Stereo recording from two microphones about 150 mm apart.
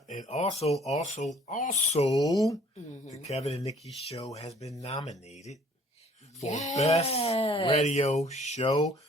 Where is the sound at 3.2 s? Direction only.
45° left (ahead or behind).